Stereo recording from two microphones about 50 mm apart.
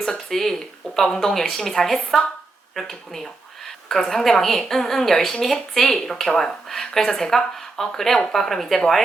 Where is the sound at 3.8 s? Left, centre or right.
Centre.